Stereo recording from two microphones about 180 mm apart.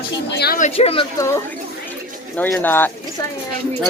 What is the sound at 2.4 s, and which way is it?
Speech, 10° left (ahead or behind).